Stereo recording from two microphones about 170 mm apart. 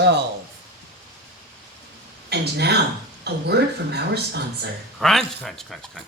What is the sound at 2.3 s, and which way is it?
Speech, 75° right (ahead or behind).